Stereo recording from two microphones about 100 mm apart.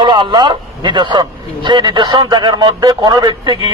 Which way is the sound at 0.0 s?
50° right (ahead or behind).